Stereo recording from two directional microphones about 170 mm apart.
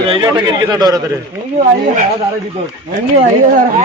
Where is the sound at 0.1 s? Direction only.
25° right (ahead or behind).